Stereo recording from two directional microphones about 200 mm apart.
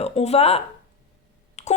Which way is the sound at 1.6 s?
35° left (ahead or behind).